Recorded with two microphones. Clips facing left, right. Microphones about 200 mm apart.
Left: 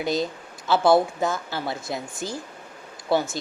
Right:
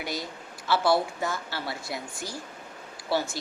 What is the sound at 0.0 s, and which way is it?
Speech, 20° left (ahead or behind).